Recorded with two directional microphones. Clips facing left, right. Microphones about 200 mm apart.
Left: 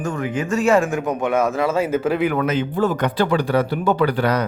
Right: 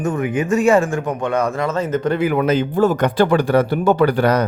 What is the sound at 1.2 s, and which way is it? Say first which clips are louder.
Speech: left 1 dB; 5° left (ahead or behind).